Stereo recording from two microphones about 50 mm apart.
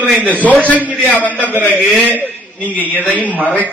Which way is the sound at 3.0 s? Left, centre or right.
Left.